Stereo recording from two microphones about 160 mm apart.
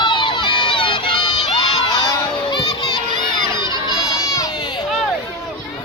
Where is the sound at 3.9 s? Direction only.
25° left (ahead or behind).